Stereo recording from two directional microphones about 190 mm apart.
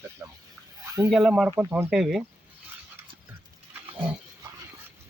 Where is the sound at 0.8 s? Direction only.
15° right (ahead or behind).